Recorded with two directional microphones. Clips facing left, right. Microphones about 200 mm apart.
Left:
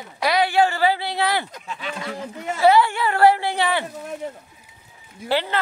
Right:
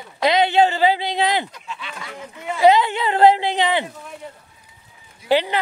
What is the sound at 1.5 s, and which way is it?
Speech, 45° left (ahead or behind).